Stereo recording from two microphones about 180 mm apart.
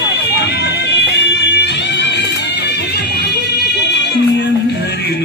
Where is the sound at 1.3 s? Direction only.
70° left (ahead or behind).